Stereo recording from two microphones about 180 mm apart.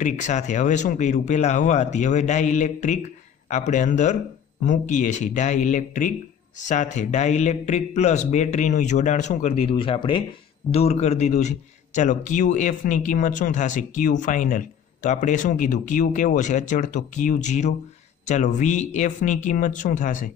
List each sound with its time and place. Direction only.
0.0 s a man's voice: 40° left (ahead or behind)